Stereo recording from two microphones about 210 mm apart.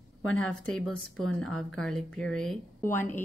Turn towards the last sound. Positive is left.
turn(degrees=10)  # may be behind; listen again after turning